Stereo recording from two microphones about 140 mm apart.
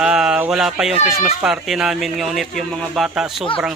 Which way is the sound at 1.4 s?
5° right (ahead or behind).